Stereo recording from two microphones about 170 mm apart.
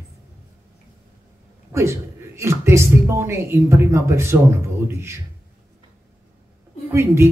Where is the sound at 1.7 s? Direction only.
15° right (ahead or behind).